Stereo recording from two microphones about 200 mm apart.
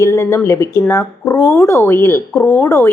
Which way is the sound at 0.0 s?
15° left (ahead or behind).